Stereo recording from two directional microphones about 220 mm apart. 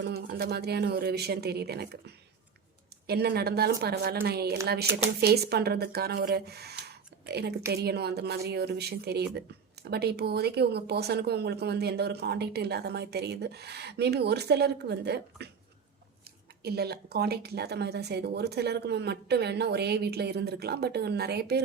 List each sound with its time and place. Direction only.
0.0 s a woman's voice: 45° right (ahead or behind)
16.6 s speech: 45° right (ahead or behind)